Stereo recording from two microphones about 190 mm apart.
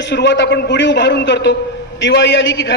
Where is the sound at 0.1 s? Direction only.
65° left (ahead or behind).